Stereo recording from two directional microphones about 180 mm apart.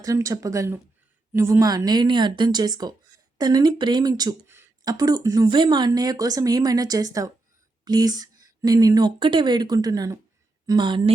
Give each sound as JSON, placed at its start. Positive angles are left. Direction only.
{"t": 0.0, "sound": "speech", "side_deg": -20}